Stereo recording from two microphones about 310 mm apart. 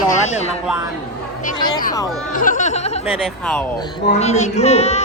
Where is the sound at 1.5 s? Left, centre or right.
Centre.